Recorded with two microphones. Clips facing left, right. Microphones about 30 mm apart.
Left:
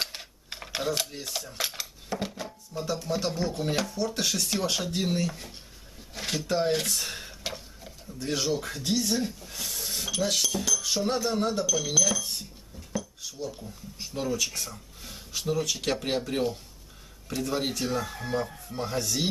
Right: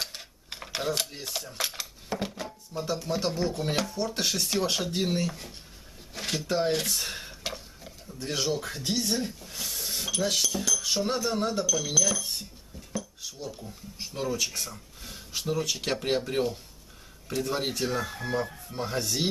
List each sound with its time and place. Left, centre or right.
0.0 s typing: centre
0.5 s speech: centre
6.1 s dishes: centre
8.7 s speech: centre
10.8 s cutlery: centre
11.2 s speech: centre
13.5 s speech: centre